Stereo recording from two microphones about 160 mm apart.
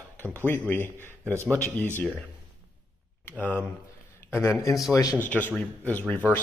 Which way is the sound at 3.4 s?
10° left (ahead or behind).